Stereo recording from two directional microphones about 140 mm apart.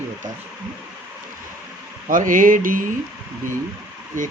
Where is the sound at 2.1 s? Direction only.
75° right (ahead or behind).